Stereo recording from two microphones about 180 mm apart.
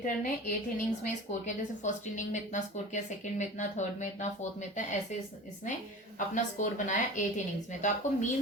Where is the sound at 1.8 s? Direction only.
45° left (ahead or behind).